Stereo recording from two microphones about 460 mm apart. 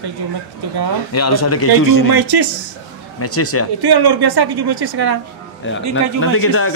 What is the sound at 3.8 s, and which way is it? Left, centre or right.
A woman's voice, right.